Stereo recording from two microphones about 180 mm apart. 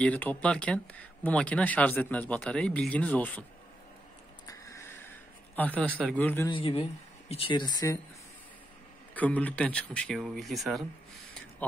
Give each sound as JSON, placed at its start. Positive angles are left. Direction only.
{"t": 0.0, "sound": "speech", "side_deg": 10}
{"t": 4.5, "sound": "a sound", "side_deg": 15}
{"t": 5.6, "sound": "speech", "side_deg": 10}
{"t": 6.5, "sound": "speech", "side_deg": 30}
{"t": 9.1, "sound": "speech", "side_deg": 10}